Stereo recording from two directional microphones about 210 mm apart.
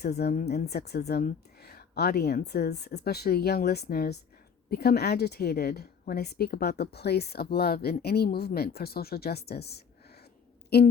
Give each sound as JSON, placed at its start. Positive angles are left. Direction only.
{"t": 0.0, "sound": "a woman's voice", "side_deg": 50}